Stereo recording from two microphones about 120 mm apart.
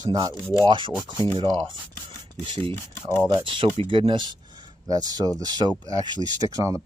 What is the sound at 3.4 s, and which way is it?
Speech, 45° right (ahead or behind).